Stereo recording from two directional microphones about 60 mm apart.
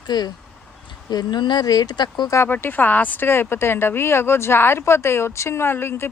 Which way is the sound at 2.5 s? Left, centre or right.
Left.